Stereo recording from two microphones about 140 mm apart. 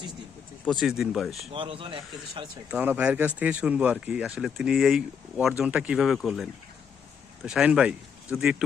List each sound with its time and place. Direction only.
0.6 s speech: centre (ahead or behind)
1.5 s speech: 40° right (ahead or behind)
2.6 s speech: 10° right (ahead or behind)